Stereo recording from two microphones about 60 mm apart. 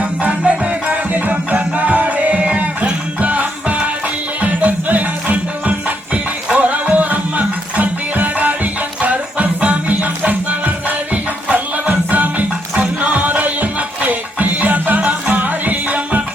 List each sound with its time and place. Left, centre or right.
0.0 s music: right